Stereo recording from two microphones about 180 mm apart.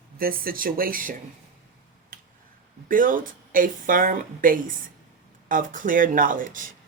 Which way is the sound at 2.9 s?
50° right (ahead or behind).